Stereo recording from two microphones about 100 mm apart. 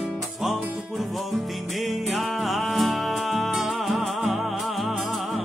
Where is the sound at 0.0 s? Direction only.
Centre (ahead or behind).